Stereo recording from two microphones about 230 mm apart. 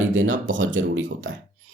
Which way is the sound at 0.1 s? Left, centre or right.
Right.